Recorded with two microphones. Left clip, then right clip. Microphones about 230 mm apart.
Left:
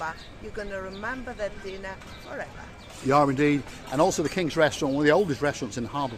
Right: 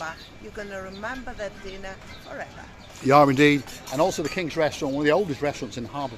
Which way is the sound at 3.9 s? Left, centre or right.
Centre.